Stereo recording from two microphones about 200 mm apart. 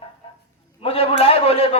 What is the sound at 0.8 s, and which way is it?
Speech, 30° left (ahead or behind).